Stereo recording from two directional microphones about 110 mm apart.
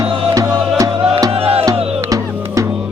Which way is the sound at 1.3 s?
65° right (ahead or behind).